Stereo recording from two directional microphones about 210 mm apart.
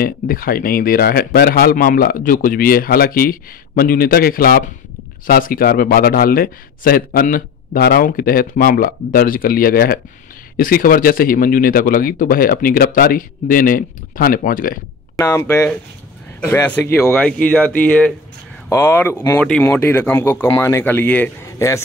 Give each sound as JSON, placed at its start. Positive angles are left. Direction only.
{"t": 0.0, "sound": "speech", "side_deg": 45}
{"t": 15.1, "sound": "speech", "side_deg": 15}